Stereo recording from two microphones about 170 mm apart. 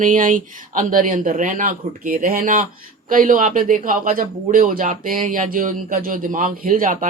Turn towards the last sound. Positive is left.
turn(degrees=-50)  # may be behind; listen again after turning